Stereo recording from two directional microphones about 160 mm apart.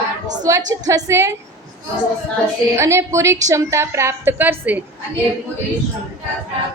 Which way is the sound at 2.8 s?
15° right (ahead or behind).